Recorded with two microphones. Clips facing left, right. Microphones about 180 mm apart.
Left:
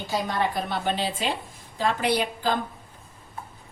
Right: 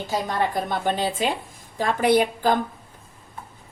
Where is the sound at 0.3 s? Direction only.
50° right (ahead or behind).